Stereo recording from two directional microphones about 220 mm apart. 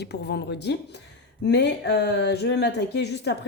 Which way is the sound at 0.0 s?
50° left (ahead or behind).